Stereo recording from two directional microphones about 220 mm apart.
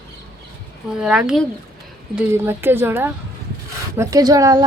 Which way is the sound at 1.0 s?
5° right (ahead or behind).